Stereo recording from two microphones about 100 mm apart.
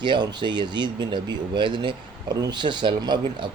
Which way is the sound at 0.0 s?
50° right (ahead or behind).